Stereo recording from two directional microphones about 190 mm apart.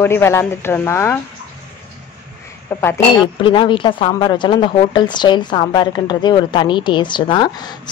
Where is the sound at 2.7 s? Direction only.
15° left (ahead or behind).